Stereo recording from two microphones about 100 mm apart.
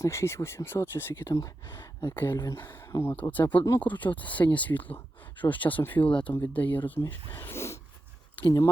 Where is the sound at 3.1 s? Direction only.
15° left (ahead or behind).